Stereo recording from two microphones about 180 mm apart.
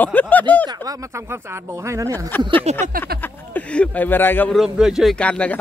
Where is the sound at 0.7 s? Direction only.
15° right (ahead or behind).